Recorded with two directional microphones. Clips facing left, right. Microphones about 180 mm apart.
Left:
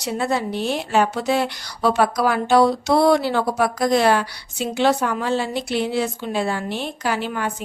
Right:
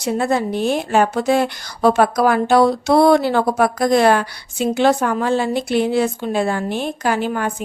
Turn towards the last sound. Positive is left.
turn(degrees=-45)  # may be behind; listen again after turning